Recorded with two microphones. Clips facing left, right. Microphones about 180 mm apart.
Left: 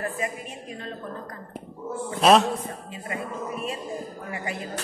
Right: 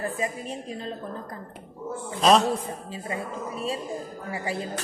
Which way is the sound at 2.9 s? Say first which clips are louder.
Right 1 dB; 30° right (ahead or behind).